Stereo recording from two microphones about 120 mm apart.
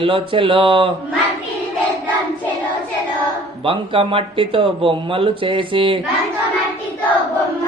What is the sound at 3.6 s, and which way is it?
Speech, 50° right (ahead or behind).